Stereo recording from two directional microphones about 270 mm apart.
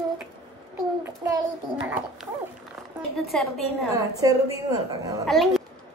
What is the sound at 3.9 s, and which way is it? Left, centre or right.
Speech, centre.